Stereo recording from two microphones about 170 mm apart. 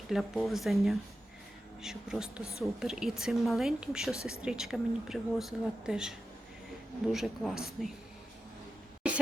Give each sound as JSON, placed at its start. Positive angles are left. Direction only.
{"t": 0.1, "sound": "a woman's voice", "side_deg": 0}
{"t": 2.4, "sound": "a woman's voice", "side_deg": 15}
{"t": 2.8, "sound": "a woman's voice", "side_deg": -5}